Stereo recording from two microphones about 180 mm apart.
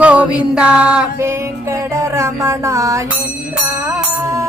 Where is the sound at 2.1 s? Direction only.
15° right (ahead or behind).